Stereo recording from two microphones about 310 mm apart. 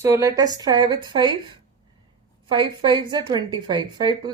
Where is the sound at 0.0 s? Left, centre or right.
Centre.